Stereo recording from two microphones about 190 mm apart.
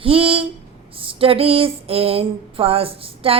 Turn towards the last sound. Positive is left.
turn(degrees=-30)  # may be behind; listen again after turning